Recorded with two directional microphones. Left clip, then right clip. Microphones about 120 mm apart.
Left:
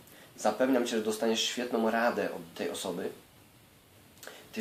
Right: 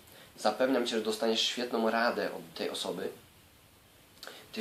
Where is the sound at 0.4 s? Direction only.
5° right (ahead or behind).